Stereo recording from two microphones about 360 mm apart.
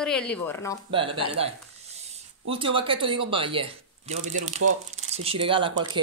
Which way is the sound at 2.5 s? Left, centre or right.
Centre.